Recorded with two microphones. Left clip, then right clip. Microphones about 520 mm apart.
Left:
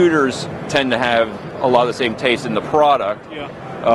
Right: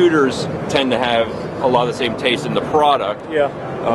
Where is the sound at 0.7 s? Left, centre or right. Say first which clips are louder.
Left 1 dB; left.